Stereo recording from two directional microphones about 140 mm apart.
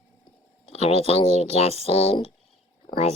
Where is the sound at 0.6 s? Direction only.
45° left (ahead or behind).